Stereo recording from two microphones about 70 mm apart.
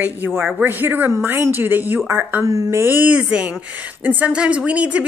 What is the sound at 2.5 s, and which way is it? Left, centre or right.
Speech, right.